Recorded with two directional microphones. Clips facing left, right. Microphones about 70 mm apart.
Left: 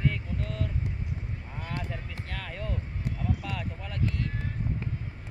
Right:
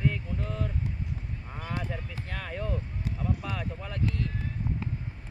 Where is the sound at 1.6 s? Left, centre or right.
Centre.